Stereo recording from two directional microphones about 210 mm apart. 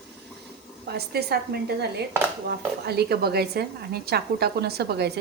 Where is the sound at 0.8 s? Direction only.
50° right (ahead or behind).